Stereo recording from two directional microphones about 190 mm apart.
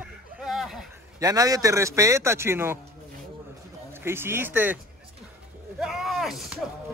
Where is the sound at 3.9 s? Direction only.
10° right (ahead or behind).